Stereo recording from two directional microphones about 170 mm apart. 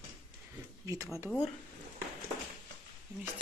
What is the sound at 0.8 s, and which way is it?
Speech, 20° right (ahead or behind).